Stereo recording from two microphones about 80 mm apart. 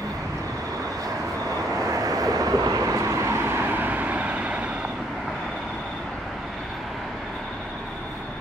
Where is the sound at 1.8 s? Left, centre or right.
Right; by 4.9 s centre.